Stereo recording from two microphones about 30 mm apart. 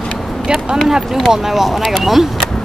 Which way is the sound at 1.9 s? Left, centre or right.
Centre.